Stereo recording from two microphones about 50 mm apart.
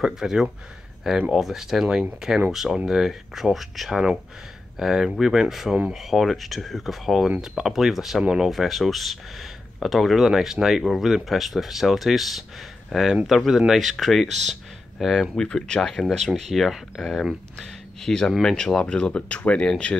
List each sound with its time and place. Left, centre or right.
0.0 s speech: centre
8.2 s speech: centre
8.5 s speech: centre
15.3 s speech: centre
17.6 s speech: centre